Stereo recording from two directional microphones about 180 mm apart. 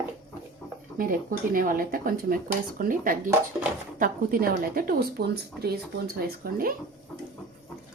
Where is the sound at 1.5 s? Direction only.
50° right (ahead or behind).